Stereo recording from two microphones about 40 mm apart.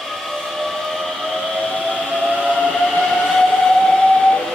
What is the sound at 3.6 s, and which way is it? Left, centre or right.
Steam whistle, centre.